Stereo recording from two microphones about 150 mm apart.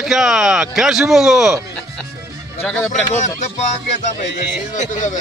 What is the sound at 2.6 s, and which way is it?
Speech, 15° left (ahead or behind).